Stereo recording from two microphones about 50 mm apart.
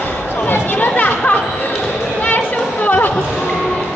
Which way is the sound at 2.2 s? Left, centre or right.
Left.